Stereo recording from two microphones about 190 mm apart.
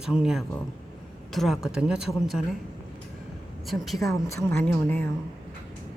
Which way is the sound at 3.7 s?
Centre (ahead or behind).